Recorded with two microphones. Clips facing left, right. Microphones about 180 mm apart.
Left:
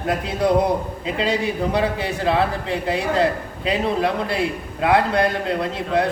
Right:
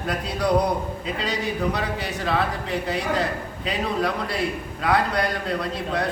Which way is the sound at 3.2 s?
30° left (ahead or behind).